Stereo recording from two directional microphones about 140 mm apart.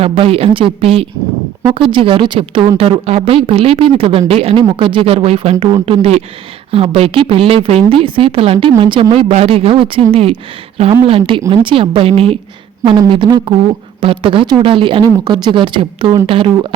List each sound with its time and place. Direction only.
0.0 s speech: 40° right (ahead or behind)